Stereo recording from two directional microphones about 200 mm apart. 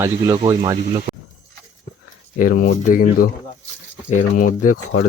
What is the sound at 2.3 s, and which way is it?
Speech, 45° left (ahead or behind).